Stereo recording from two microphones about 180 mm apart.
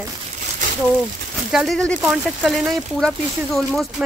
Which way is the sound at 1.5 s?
Centre (ahead or behind).